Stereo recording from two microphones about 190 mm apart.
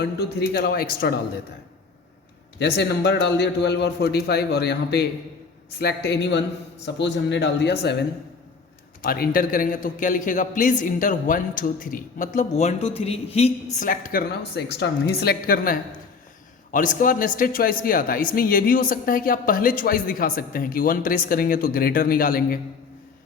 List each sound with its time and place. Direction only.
0.0 s a man's voice: 60° left (ahead or behind)
2.6 s a man's voice: 60° left (ahead or behind)